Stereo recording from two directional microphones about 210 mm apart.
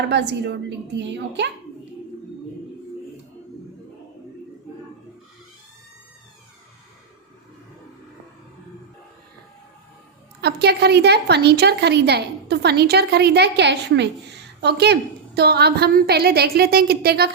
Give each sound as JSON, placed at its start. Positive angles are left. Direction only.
{"t": 0.1, "sound": "a woman's voice", "side_deg": -55}
{"t": 10.4, "sound": "a woman's voice", "side_deg": -50}